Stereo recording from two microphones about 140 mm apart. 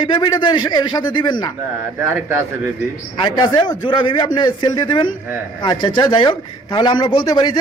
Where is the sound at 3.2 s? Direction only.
30° left (ahead or behind).